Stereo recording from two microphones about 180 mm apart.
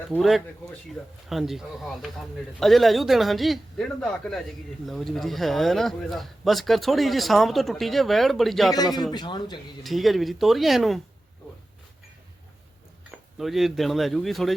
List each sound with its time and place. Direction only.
0.1 s a man's voice: centre (ahead or behind)
9.1 s speech: 25° left (ahead or behind)
9.8 s a man's voice: centre (ahead or behind)
13.1 s speech: centre (ahead or behind)